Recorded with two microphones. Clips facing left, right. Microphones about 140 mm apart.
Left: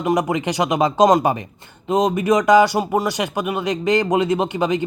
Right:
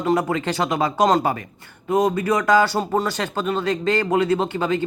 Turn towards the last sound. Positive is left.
turn(degrees=15)  # may be behind; listen again after turning